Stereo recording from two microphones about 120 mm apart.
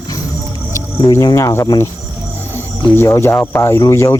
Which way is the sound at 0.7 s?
25° left (ahead or behind).